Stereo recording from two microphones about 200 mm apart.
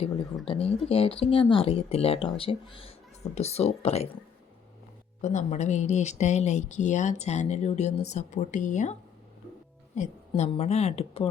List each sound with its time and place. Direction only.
0.4 s speech: 30° left (ahead or behind)
5.2 s speech: 35° left (ahead or behind)